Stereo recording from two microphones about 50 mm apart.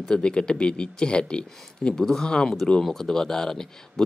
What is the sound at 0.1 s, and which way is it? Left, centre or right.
Speech, centre.